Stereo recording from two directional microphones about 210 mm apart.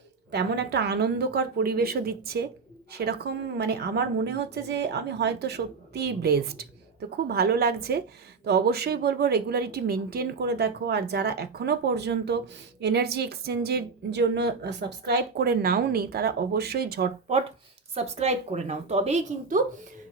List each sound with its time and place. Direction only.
0.3 s a woman's voice: 55° right (ahead or behind)
17.9 s a woman's voice: 30° right (ahead or behind)